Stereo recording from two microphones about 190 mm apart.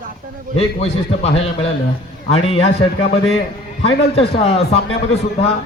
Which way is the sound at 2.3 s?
30° left (ahead or behind).